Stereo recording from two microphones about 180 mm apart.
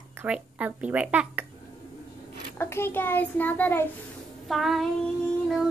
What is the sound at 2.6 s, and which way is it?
A child's voice, 15° left (ahead or behind).